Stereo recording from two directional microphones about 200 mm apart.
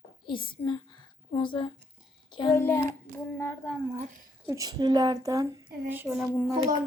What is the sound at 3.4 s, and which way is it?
Speech, 10° left (ahead or behind).